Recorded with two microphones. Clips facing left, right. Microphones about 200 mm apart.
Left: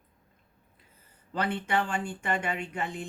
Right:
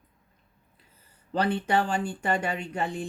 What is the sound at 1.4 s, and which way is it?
Speech, 35° right (ahead or behind).